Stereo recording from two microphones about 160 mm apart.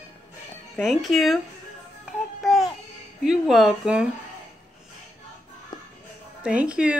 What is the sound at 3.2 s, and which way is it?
Speech, centre (ahead or behind).